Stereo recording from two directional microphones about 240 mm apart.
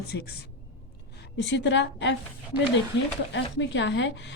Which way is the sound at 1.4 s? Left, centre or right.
Left.